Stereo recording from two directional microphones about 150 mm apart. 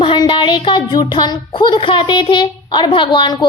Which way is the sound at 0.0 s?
30° left (ahead or behind).